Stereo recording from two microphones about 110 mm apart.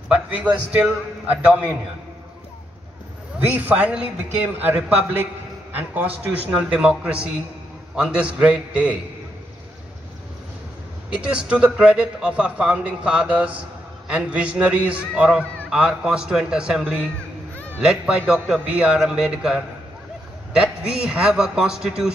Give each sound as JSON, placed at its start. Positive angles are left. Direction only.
{"t": 0.1, "sound": "a man's voice", "side_deg": -10}
{"t": 3.3, "sound": "a man's voice", "side_deg": -15}
{"t": 11.1, "sound": "a man's voice", "side_deg": -10}